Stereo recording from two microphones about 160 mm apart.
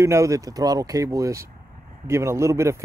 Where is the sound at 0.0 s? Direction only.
20° right (ahead or behind).